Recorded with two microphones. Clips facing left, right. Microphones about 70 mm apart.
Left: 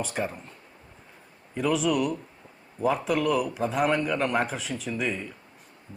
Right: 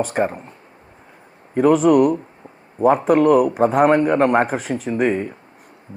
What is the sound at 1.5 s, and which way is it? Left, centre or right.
Speech, right.